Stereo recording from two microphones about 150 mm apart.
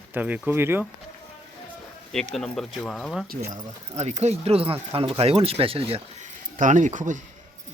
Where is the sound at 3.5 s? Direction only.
50° right (ahead or behind).